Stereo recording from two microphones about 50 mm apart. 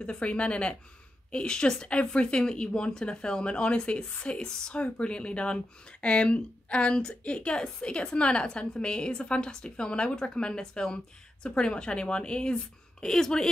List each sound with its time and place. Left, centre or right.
0.0 s a woman's voice: left